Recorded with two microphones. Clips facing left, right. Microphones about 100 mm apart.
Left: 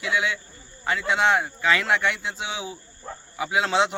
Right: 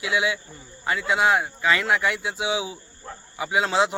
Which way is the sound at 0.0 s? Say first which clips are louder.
Right 1 dB; 5° right (ahead or behind).